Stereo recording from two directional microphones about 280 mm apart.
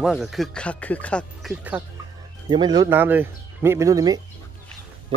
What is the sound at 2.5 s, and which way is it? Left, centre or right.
Speech, centre.